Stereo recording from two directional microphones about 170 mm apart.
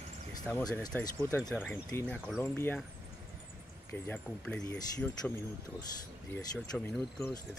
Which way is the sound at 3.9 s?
10° left (ahead or behind).